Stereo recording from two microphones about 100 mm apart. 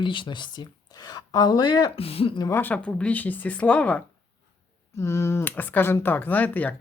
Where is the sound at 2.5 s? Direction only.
20° left (ahead or behind).